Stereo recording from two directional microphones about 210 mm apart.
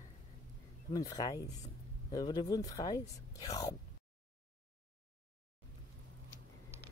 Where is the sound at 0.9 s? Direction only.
15° left (ahead or behind).